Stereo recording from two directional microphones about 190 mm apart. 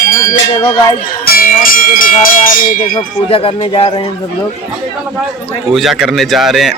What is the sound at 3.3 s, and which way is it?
Speech, 30° left (ahead or behind).